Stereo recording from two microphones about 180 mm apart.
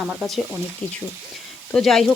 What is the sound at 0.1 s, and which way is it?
Speech, centre (ahead or behind).